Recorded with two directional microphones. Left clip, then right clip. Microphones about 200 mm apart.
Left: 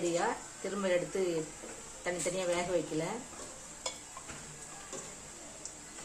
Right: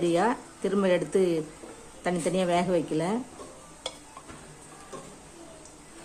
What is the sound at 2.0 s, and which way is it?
A woman's voice, 50° right (ahead or behind).